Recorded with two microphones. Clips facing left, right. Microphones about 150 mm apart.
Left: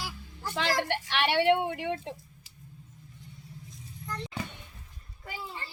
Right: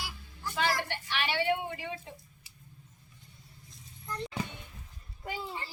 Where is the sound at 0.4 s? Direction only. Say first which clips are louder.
Left 2 dB; 85° left; by 2.1 s 65° left (ahead or behind).